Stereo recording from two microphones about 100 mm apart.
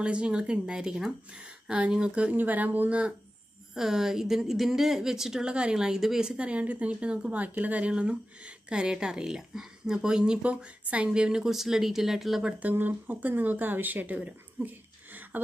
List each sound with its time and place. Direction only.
0.0 s a woman's voice: 10° right (ahead or behind)
12.5 s a woman's voice: 15° right (ahead or behind)